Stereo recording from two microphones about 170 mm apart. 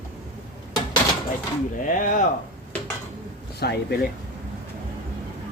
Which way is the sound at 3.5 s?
70° left (ahead or behind).